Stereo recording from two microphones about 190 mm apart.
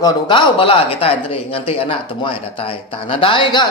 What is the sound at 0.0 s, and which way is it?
Speech, 25° left (ahead or behind).